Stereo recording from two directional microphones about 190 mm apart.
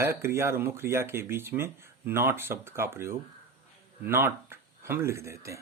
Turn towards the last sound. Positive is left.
turn(degrees=-15)  # may be behind; listen again after turning